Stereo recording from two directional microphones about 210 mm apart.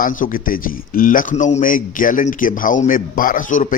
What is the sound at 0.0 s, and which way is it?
A man's voice, 40° left (ahead or behind).